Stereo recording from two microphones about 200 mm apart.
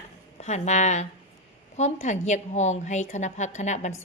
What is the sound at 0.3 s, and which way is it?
A woman's voice, 35° left (ahead or behind).